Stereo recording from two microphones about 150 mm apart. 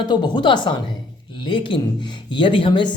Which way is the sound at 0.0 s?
30° left (ahead or behind).